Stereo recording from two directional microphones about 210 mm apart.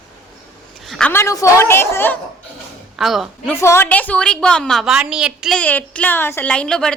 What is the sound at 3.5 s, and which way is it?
A woman's voice, 10° left (ahead or behind).